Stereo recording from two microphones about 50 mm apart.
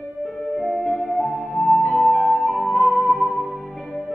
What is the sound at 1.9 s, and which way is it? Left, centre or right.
Music, left.